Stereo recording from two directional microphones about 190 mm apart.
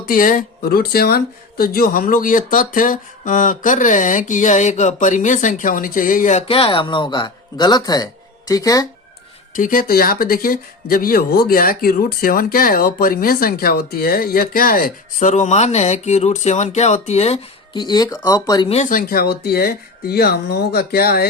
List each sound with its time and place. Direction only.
0.1 s speech: 45° left (ahead or behind); by 8.9 s 20° left (ahead or behind)
9.6 s speech: 45° left (ahead or behind); by 18.7 s 20° left (ahead or behind)
18.7 s speech: 40° left (ahead or behind)